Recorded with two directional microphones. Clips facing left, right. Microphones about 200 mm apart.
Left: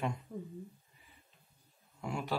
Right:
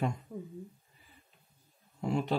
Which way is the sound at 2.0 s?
30° right (ahead or behind).